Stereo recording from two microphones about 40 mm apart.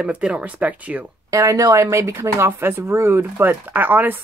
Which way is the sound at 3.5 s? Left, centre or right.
Right.